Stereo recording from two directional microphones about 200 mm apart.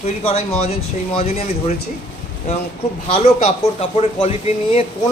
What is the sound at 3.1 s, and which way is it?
Speech, 30° left (ahead or behind).